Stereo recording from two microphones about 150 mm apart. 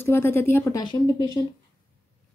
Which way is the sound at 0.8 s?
30° left (ahead or behind).